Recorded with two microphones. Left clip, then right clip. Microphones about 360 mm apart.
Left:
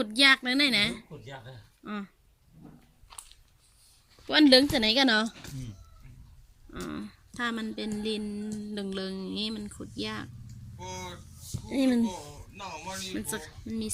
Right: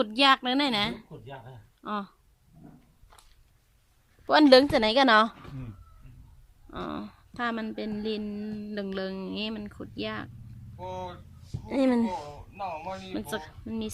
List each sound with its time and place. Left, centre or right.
0.0 s speech: centre
4.3 s speech: centre
6.8 s speech: centre
12.0 s speech: right
12.5 s speech: centre